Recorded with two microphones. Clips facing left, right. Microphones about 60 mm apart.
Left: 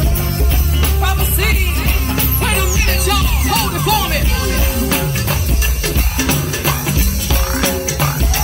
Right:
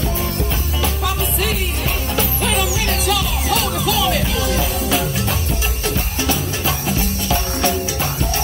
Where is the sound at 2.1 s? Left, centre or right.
Left.